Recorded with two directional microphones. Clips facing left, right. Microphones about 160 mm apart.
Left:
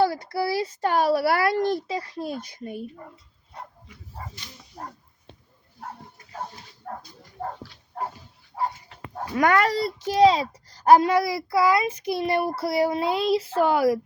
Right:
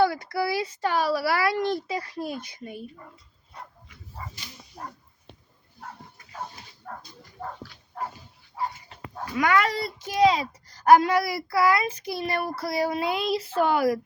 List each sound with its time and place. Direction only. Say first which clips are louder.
0.0 s a child's voice: even; 30° left (ahead or behind)
1.9 s a child's voice: left 1 dB; 25° left (ahead or behind)
2.4 s a child's voice: left 4 dB; 45° left (ahead or behind)
7.4 s dog: left 4 dB; 35° left (ahead or behind)
8.5 s dog: left 3 dB; 45° left (ahead or behind)
9.1 s a child's voice: left 2 dB; 45° left (ahead or behind)